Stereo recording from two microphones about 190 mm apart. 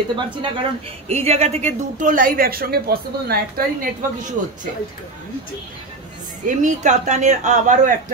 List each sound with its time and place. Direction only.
0.1 s a woman's voice: 25° right (ahead or behind); by 4.3 s 50° right (ahead or behind)
6.4 s a man's voice: 40° right (ahead or behind)